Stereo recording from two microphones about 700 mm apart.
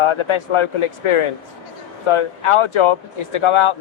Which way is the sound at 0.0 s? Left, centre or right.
Left.